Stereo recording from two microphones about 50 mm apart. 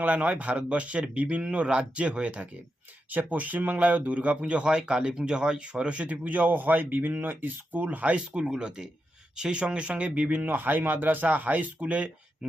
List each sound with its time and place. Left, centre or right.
0.0 s speech: right
4.4 s speech: right
12.4 s speech: centre